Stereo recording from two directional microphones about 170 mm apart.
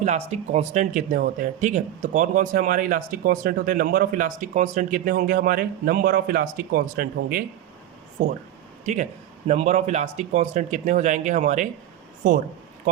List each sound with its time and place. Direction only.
0.0 s speech: 40° right (ahead or behind)
9.5 s speech: 40° right (ahead or behind)